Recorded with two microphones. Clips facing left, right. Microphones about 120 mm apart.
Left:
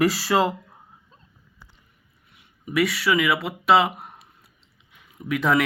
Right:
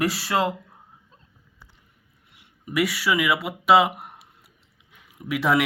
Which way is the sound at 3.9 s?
15° right (ahead or behind).